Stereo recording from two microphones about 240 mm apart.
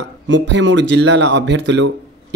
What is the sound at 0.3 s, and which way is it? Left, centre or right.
Speech, right.